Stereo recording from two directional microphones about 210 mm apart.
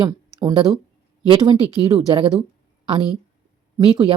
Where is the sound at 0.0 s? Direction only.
15° right (ahead or behind).